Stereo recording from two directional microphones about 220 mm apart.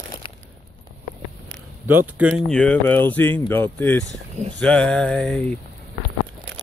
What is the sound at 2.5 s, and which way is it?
Speech, 5° left (ahead or behind).